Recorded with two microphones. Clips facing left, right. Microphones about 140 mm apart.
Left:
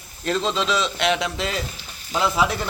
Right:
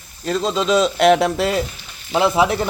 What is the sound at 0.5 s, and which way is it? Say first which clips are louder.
Speech: right 7 dB; 45° right (ahead or behind).